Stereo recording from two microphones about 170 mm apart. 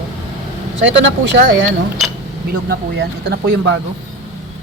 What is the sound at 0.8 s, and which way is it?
Speech, 90° right.